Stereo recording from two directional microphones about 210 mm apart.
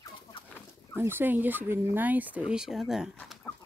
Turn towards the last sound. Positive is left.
turn(degrees=0)  # may be behind; listen again after turning